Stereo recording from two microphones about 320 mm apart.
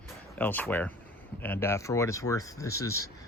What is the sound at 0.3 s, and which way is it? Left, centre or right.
Speech, centre.